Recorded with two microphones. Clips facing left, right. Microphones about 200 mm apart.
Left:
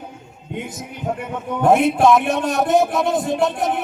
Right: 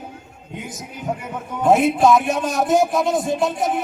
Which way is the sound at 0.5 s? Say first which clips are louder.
Left 3 dB; centre (ahead or behind).